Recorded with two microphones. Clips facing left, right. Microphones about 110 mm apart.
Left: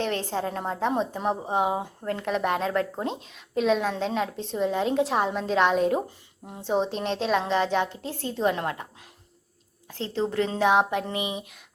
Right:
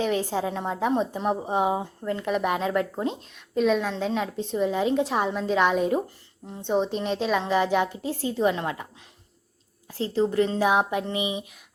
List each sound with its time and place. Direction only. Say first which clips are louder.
0.0 s a woman's voice: right 2 dB; 5° right (ahead or behind)
10.0 s a woman's voice: right 3 dB; 5° right (ahead or behind)